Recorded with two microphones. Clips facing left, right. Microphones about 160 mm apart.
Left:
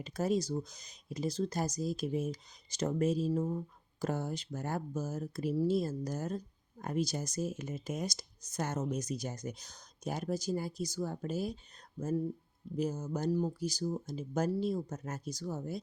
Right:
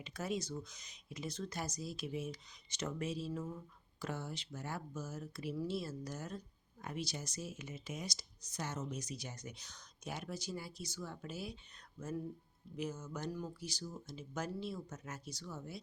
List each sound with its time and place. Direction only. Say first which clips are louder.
0.0 s speech: left 8 dB; 40° left (ahead or behind)